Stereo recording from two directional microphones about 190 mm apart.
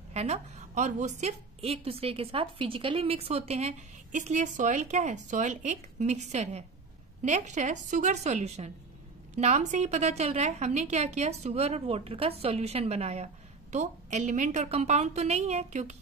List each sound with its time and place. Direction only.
0.1 s a woman's voice: 35° right (ahead or behind)